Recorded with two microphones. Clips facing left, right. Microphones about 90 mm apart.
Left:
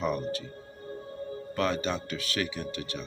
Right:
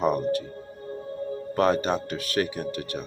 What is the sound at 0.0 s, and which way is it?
Speech, 50° right (ahead or behind).